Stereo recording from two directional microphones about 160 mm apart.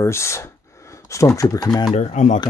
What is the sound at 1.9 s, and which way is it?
Speech, 45° left (ahead or behind).